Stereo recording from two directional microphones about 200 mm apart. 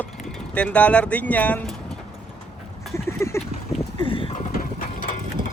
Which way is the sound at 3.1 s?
15° left (ahead or behind).